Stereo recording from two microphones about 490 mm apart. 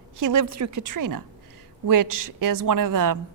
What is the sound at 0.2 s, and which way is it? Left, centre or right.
A woman's voice, right.